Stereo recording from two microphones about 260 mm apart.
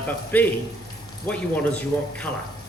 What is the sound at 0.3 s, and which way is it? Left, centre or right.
Speech, centre.